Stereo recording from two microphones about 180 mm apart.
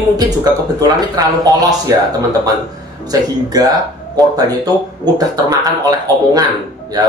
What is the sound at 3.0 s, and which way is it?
Speech, 20° right (ahead or behind).